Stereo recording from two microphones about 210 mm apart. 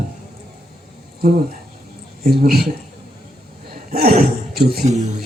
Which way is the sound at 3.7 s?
45° right (ahead or behind).